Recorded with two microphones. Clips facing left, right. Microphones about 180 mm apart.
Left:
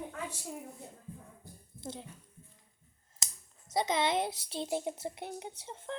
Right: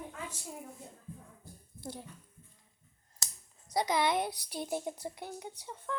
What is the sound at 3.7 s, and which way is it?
A child's voice, 25° left (ahead or behind).